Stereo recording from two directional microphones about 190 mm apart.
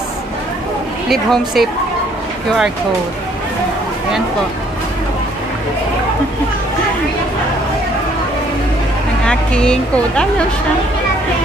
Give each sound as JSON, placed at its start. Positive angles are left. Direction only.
{"t": 1.0, "sound": "speech", "side_deg": 0}
{"t": 9.2, "sound": "speech", "side_deg": 5}